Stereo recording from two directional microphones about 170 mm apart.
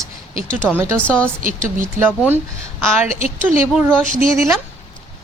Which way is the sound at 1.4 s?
50° right (ahead or behind).